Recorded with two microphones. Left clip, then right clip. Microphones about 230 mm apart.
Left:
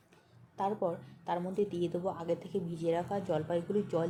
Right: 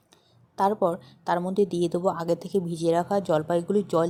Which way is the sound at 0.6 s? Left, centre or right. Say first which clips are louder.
Right 10 dB; right.